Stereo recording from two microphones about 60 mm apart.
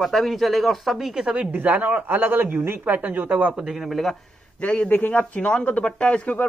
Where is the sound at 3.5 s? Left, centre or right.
Centre.